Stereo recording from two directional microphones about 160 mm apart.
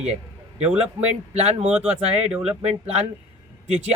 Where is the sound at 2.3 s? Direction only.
5° right (ahead or behind).